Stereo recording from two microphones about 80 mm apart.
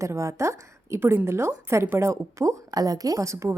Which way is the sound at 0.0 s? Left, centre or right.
Right.